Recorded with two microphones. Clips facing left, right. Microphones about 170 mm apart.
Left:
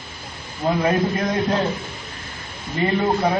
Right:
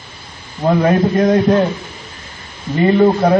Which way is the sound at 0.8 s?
45° right (ahead or behind).